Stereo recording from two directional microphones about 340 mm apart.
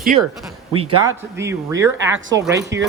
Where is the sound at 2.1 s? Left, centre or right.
Right.